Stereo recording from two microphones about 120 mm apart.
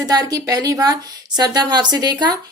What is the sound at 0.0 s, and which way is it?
A woman's voice, 30° right (ahead or behind).